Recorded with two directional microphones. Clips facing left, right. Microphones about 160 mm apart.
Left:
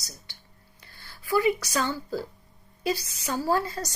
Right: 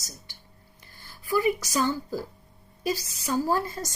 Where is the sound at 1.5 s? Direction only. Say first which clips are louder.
Right 2 dB; 15° right (ahead or behind).